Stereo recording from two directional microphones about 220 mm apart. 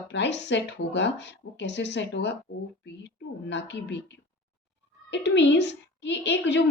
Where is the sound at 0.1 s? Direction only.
55° left (ahead or behind).